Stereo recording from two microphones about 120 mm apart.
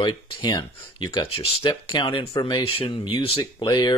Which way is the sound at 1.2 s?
55° left (ahead or behind).